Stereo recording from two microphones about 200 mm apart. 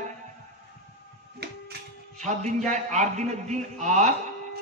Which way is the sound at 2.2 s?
35° right (ahead or behind).